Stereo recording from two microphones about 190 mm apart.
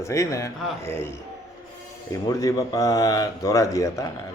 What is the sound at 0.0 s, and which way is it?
Speech, 15° left (ahead or behind).